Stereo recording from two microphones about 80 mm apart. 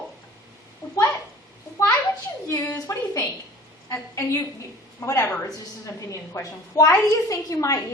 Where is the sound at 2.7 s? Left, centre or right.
Left.